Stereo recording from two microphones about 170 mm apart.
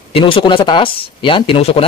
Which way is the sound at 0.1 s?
30° left (ahead or behind).